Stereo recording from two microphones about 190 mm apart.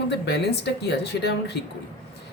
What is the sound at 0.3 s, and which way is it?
Speech, 60° left (ahead or behind).